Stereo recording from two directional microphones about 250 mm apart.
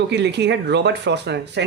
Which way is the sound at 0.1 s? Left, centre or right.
Right.